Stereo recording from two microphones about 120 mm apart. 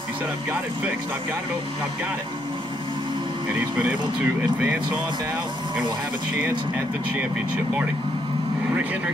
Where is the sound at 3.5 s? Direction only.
15° right (ahead or behind).